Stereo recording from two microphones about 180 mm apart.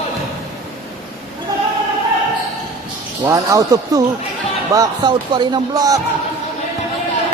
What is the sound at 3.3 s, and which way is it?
Speech, 20° right (ahead or behind).